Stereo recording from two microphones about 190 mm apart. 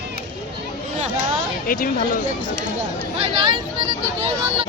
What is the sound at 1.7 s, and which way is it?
Speech, 45° left (ahead or behind).